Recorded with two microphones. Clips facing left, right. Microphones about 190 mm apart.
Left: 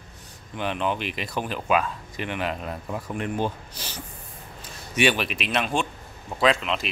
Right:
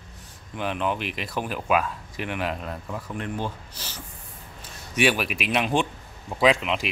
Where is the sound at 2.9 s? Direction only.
15° left (ahead or behind).